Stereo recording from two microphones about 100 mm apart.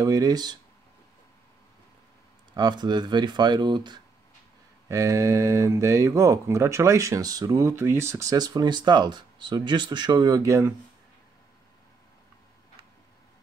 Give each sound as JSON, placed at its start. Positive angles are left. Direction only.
{"t": 0.0, "sound": "speech", "side_deg": -35}
{"t": 2.5, "sound": "speech", "side_deg": -45}
{"t": 4.8, "sound": "speech", "side_deg": -30}